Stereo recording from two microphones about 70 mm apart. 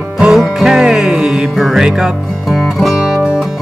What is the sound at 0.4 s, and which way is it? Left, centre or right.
Music, centre.